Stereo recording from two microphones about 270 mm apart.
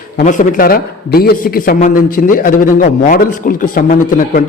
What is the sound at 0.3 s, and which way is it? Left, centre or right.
A man's voice, left.